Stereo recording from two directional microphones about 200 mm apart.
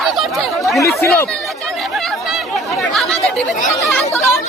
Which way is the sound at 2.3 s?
Centre (ahead or behind).